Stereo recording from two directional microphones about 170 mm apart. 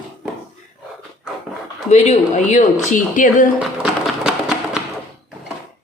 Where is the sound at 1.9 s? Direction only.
40° left (ahead or behind).